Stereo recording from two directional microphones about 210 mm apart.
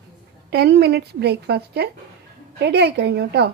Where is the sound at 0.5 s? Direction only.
50° right (ahead or behind).